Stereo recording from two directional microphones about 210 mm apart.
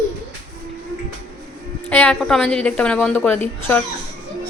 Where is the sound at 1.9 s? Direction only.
5° left (ahead or behind).